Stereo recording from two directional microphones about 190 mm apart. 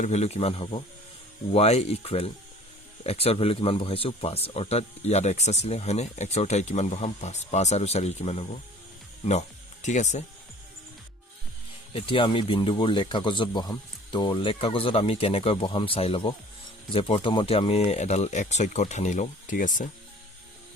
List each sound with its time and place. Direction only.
0.0 s speech: 35° left (ahead or behind)
9.8 s speech: 40° left (ahead or behind)
11.9 s speech: 25° left (ahead or behind); by 19.9 s 45° left (ahead or behind)